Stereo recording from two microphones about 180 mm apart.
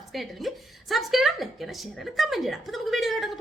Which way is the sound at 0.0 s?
Centre (ahead or behind).